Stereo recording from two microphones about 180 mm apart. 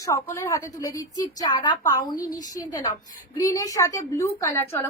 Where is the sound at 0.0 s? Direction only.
15° left (ahead or behind).